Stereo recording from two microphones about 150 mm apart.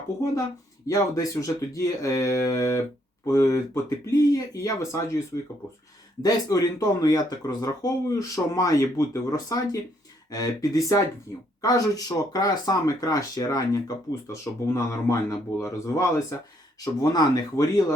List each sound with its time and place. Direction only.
0.2 s speech: 20° left (ahead or behind)
6.2 s speech: 25° left (ahead or behind)